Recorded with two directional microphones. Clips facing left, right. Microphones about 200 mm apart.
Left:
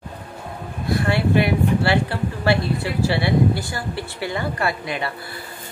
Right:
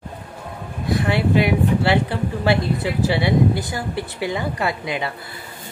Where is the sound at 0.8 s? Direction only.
20° right (ahead or behind).